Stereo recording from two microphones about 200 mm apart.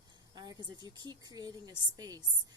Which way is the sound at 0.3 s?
20° right (ahead or behind).